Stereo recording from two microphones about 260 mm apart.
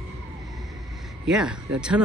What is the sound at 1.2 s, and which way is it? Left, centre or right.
Speech, centre.